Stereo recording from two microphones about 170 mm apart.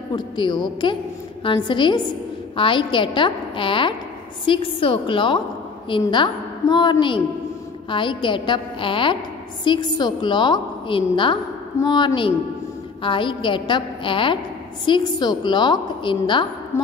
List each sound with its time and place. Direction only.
0.1 s a woman's voice: 25° left (ahead or behind)
16.7 s a woman's voice: 15° left (ahead or behind)